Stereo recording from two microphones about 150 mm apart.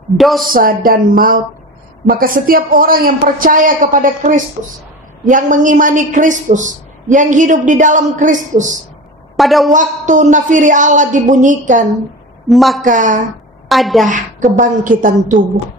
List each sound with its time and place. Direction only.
0.2 s a man's voice: centre (ahead or behind)
0.5 s a man's voice: 70° right (ahead or behind)
9.4 s a man's voice: centre (ahead or behind)
9.7 s a man's voice: 55° right (ahead or behind)
12.4 s a man's voice: centre (ahead or behind)
12.8 s a man's voice: 60° right (ahead or behind)
13.7 s a woman's voice: centre (ahead or behind)
14.0 s a man's voice: 60° right (ahead or behind)